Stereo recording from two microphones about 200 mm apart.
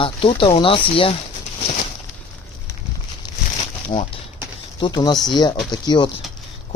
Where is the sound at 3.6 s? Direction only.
30° left (ahead or behind).